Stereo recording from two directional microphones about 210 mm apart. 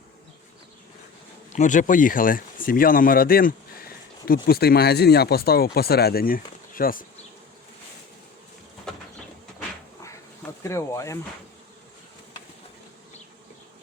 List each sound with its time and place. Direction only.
1.5 s speech: 35° left (ahead or behind)
8.9 s a sound: centre (ahead or behind)
10.6 s speech: 15° left (ahead or behind)